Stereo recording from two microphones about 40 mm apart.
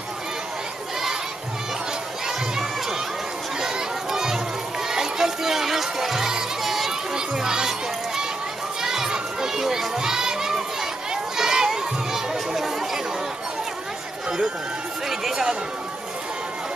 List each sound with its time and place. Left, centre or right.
2.2 s crowd: centre
3.6 s children playing: centre
4.8 s music: centre
7.2 s crowd: centre
8.8 s children playing: centre
11.3 s crowd: centre
15.0 s a sound: centre